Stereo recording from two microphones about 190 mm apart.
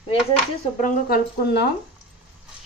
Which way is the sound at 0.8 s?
50° left (ahead or behind).